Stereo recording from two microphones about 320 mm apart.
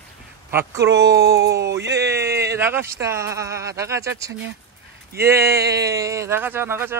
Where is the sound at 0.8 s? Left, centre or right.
Right.